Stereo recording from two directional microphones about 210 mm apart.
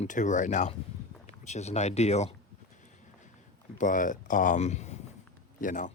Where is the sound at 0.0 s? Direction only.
35° left (ahead or behind).